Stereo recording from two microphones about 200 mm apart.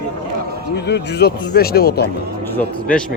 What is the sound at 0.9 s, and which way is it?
Speech, 55° left (ahead or behind).